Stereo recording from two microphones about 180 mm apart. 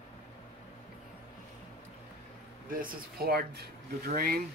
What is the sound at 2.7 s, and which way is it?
Speech, 50° right (ahead or behind).